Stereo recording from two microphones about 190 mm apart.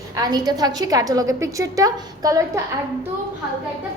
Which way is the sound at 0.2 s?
20° right (ahead or behind).